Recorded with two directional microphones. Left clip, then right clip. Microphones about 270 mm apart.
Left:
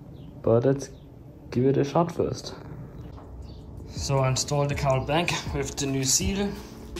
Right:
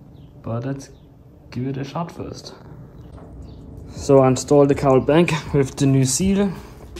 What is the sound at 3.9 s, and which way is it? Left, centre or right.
Speech, centre.